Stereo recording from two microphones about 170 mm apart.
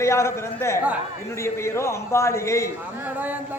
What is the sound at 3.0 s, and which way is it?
Speech, 10° right (ahead or behind).